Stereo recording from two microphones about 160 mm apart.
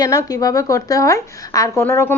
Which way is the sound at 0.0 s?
20° left (ahead or behind).